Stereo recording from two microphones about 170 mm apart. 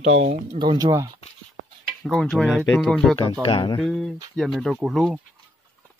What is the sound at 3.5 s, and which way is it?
Speech, 30° left (ahead or behind).